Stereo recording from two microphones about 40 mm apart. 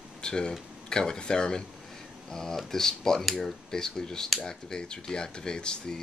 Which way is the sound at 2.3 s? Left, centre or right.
Centre.